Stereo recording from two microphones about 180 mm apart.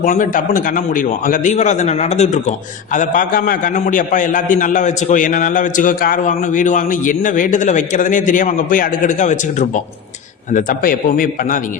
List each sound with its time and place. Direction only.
0.0 s a man's voice: 45° left (ahead or behind)